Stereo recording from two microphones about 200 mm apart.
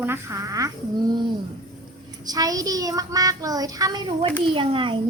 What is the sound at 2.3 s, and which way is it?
A child's voice, 20° right (ahead or behind).